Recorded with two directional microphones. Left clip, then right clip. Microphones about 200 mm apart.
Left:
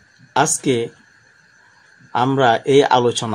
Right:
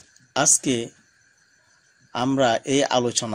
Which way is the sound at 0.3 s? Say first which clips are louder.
Left 4 dB; 35° right (ahead or behind).